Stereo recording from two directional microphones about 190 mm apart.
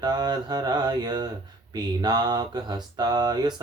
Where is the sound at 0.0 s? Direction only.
20° right (ahead or behind).